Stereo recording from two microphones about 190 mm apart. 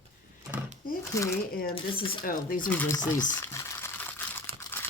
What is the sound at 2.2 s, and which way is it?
Speech, 45° left (ahead or behind).